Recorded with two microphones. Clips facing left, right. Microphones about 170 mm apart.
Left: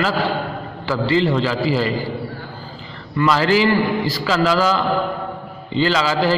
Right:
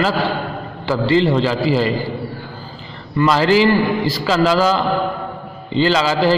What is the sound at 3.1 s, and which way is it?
A man's voice, 25° right (ahead or behind).